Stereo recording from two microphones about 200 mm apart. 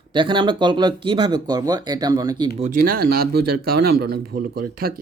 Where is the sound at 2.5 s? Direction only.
40° right (ahead or behind).